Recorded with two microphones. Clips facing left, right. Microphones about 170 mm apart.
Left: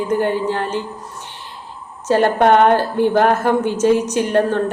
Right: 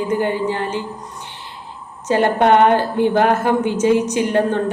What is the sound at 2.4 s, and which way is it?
Speech, 55° left (ahead or behind).